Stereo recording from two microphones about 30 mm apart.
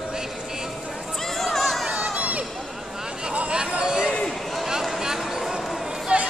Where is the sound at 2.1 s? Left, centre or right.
Right.